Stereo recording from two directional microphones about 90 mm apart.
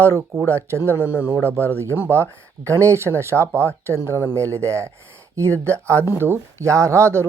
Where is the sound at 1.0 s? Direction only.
20° right (ahead or behind).